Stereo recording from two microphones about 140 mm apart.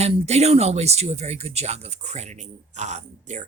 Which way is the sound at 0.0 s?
50° right (ahead or behind).